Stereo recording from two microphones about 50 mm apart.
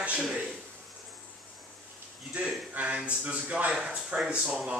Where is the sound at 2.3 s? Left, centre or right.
Right.